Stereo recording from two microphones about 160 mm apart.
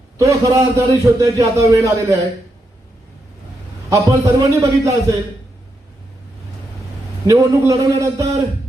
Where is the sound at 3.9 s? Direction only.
20° right (ahead or behind).